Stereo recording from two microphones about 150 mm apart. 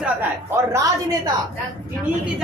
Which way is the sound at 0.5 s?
20° right (ahead or behind).